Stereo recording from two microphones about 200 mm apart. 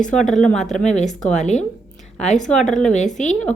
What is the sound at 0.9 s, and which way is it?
Speech, 35° left (ahead or behind).